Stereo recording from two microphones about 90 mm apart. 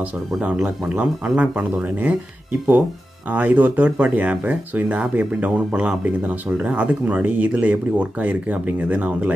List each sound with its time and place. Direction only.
0.4 s speech: 15° right (ahead or behind)
3.3 s speech: 20° right (ahead or behind)